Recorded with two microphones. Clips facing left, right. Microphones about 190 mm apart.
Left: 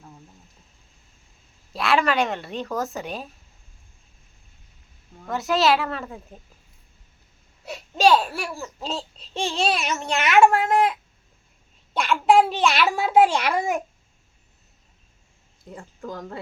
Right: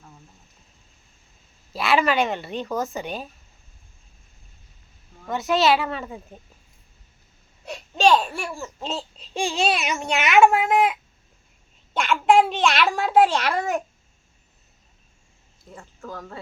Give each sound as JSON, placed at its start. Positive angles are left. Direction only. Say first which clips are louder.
{"t": 1.7, "sound": "a woman's voice", "louder": "right 1 dB", "side_deg": 0}
{"t": 5.2, "sound": "a woman's voice", "louder": "right 1 dB", "side_deg": 0}
{"t": 7.6, "sound": "babbling", "louder": "left 1 dB", "side_deg": 5}
{"t": 8.6, "sound": "a child's voice", "louder": "even", "side_deg": 0}
{"t": 11.9, "sound": "a child's voice", "louder": "even", "side_deg": 0}
{"t": 15.7, "sound": "speech", "louder": "left 2 dB", "side_deg": 15}